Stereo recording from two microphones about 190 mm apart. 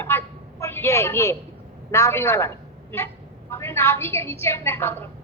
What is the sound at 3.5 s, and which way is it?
A woman's voice, 15° left (ahead or behind).